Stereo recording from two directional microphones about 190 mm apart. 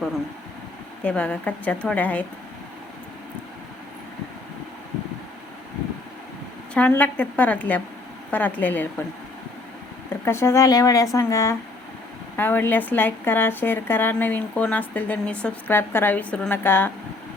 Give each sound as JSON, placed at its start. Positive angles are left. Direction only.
{"t": 1.0, "sound": "speech", "side_deg": 5}
{"t": 6.7, "sound": "speech", "side_deg": 10}
{"t": 10.2, "sound": "speech", "side_deg": 15}